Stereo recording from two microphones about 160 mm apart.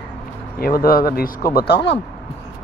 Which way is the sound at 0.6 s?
65° left (ahead or behind).